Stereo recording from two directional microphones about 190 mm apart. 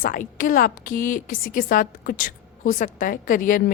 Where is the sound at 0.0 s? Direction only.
45° left (ahead or behind).